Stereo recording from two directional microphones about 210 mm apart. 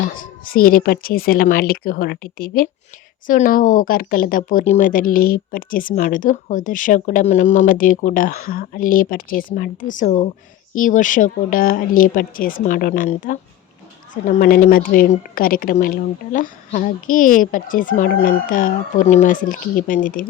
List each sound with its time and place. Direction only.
0.0 s speech: 40° left (ahead or behind)